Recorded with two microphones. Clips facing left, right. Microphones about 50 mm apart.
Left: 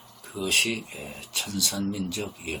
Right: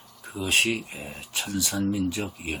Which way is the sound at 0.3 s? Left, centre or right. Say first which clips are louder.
Right 2 dB; right.